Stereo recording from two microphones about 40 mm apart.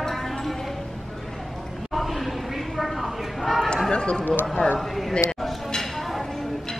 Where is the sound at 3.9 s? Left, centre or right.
Left.